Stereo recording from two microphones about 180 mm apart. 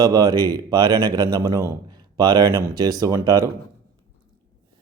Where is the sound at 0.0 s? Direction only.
20° right (ahead or behind).